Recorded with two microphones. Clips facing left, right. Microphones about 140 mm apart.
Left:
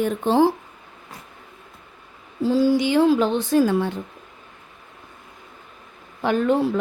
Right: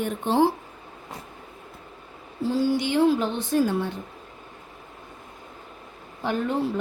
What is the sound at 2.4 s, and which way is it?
A woman's voice, 90° left.